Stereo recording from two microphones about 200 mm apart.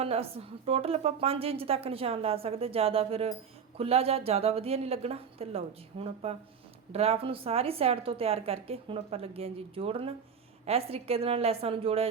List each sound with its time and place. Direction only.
0.0 s a woman's voice: 30° right (ahead or behind)